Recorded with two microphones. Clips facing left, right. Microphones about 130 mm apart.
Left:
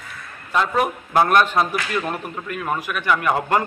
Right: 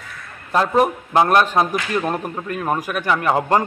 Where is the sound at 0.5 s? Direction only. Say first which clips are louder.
Right 4 dB; 35° right (ahead or behind).